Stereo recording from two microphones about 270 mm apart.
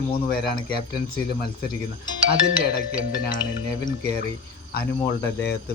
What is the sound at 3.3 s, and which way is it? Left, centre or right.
Speech, centre.